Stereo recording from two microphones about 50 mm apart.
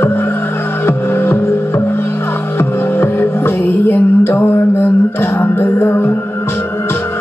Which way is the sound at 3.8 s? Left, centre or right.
Left.